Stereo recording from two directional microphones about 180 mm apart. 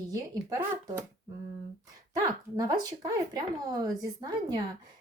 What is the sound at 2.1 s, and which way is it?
Speech, 20° right (ahead or behind).